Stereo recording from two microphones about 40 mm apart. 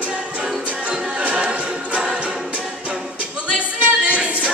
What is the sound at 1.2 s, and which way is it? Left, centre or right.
Choir, right.